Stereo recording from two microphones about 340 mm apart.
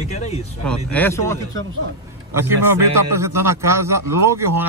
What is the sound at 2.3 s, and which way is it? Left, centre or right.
A man's voice, centre.